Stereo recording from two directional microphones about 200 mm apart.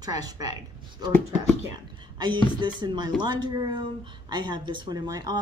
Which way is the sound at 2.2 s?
20° right (ahead or behind).